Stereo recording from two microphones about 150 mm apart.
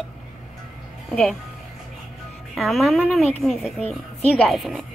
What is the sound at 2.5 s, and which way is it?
Speech, centre (ahead or behind).